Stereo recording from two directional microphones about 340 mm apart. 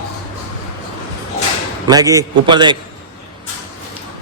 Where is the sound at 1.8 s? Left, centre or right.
Centre.